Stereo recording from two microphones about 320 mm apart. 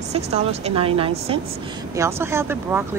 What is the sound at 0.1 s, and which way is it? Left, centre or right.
A woman's voice, centre.